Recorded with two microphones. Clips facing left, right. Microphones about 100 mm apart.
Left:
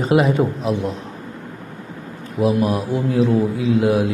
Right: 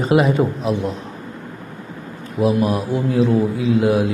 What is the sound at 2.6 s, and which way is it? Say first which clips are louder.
Speech: even; 30° right (ahead or behind).